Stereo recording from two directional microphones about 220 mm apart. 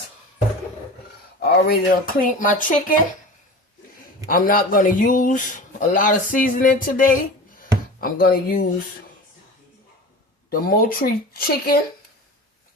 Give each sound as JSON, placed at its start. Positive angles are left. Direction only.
{"t": 1.4, "sound": "speech", "side_deg": 45}
{"t": 4.3, "sound": "speech", "side_deg": 40}
{"t": 10.5, "sound": "speech", "side_deg": 40}